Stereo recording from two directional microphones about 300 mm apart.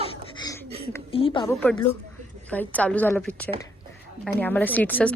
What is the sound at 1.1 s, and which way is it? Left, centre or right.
Speech, centre.